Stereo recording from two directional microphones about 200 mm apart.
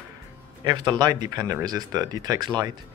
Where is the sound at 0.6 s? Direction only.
20° right (ahead or behind).